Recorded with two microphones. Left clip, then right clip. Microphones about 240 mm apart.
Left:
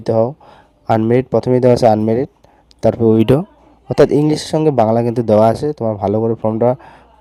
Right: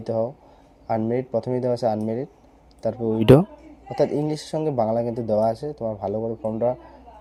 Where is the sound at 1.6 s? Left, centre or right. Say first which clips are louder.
Left 13 dB; left.